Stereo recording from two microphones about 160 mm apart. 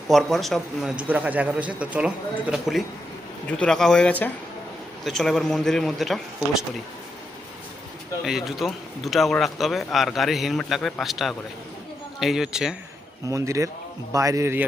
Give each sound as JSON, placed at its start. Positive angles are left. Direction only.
{"t": 0.1, "sound": "speech", "side_deg": 0}
{"t": 8.2, "sound": "speech", "side_deg": 0}
{"t": 13.2, "sound": "a man's voice", "side_deg": -20}